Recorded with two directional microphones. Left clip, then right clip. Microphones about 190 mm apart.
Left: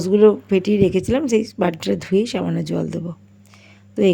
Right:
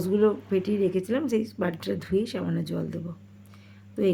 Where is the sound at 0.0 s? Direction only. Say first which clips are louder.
Left 10 dB; 30° left (ahead or behind).